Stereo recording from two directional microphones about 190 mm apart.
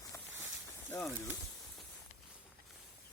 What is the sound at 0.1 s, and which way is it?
Snake, 15° left (ahead or behind).